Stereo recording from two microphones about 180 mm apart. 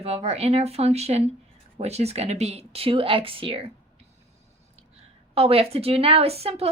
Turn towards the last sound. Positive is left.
turn(degrees=-35)  # may be behind; listen again after turning